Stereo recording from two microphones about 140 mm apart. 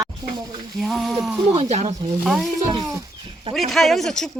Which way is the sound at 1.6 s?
50° right (ahead or behind).